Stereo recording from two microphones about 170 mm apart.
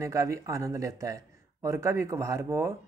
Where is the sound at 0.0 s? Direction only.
20° right (ahead or behind).